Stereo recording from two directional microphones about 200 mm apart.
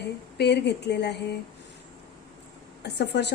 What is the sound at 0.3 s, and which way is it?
A woman's voice, 55° left (ahead or behind).